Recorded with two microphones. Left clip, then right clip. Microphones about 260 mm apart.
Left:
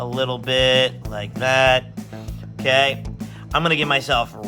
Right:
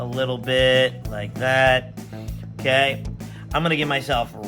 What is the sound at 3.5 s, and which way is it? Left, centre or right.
Music, centre.